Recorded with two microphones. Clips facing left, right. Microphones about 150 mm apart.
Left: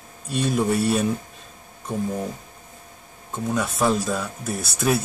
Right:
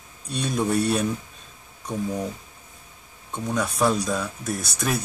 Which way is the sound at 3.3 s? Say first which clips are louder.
Left 1 dB; 5° left (ahead or behind).